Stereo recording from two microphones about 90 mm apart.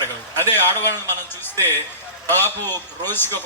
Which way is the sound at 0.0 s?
25° left (ahead or behind).